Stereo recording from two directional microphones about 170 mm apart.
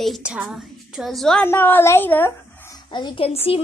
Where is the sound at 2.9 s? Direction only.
30° left (ahead or behind).